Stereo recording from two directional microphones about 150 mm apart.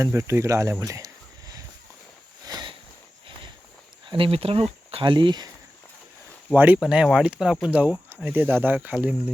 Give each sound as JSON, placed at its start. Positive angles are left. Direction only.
{"t": 0.0, "sound": "speech", "side_deg": -20}
{"t": 0.9, "sound": "a sound", "side_deg": -25}
{"t": 4.1, "sound": "speech", "side_deg": -40}
{"t": 6.5, "sound": "speech", "side_deg": -10}